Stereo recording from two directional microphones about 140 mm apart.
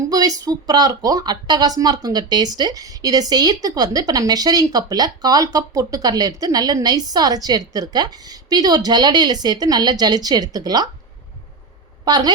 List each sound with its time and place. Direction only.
0.1 s speech: 25° right (ahead or behind)
12.0 s a woman's voice: 30° right (ahead or behind)